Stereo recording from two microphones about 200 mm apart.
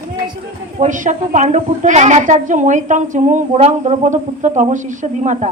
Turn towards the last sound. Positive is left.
turn(degrees=-35)  # may be behind; listen again after turning